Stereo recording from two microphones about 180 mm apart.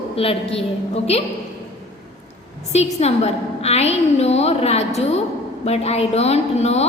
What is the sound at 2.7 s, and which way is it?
A woman's voice, 35° left (ahead or behind).